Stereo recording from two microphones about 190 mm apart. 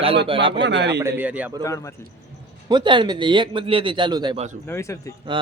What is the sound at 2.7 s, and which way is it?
Speech, 25° right (ahead or behind).